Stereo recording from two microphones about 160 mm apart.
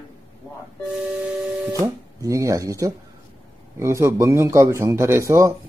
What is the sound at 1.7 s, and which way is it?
A man's voice, 20° right (ahead or behind).